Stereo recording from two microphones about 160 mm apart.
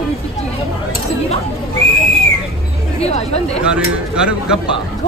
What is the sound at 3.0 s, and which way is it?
Speech, 40° left (ahead or behind).